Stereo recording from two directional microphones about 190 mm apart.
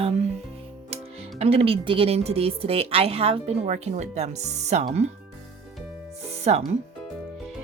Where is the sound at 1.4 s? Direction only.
30° right (ahead or behind).